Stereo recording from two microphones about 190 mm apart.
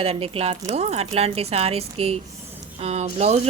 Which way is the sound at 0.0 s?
30° right (ahead or behind).